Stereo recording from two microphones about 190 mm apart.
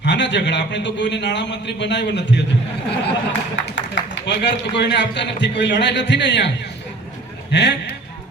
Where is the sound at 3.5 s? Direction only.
75° left (ahead or behind).